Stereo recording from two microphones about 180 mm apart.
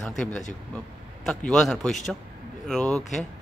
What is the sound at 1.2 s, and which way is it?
Speech, centre (ahead or behind).